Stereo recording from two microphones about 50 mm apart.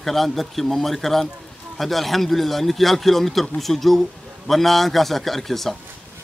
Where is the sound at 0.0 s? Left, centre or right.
Centre.